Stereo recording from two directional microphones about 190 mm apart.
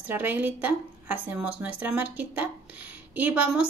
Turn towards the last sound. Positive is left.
turn(degrees=-5)  # may be behind; listen again after turning